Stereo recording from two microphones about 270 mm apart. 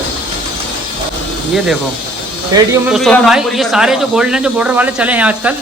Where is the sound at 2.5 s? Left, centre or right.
Centre.